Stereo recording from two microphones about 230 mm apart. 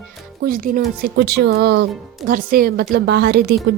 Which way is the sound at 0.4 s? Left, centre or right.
Right.